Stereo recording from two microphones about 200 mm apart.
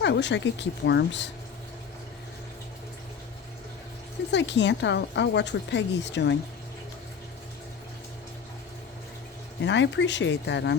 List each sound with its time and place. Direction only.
0.0 s a woman's voice: 60° left (ahead or behind)
4.3 s a woman's voice: 60° left (ahead or behind)
9.6 s a woman's voice: 65° left (ahead or behind)